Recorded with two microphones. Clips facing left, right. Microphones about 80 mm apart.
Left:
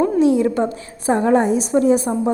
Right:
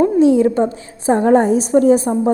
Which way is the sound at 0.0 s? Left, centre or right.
Right.